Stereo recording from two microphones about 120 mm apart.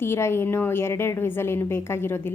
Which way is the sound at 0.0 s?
20° left (ahead or behind).